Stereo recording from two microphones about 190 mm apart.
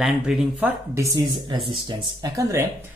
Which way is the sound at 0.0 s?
Centre (ahead or behind).